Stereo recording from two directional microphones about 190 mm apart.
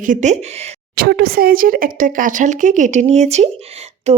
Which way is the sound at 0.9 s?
55° right (ahead or behind).